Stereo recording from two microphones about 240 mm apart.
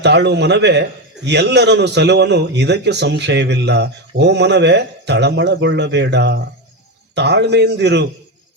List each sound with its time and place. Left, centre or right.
0.0 s a man's voice: right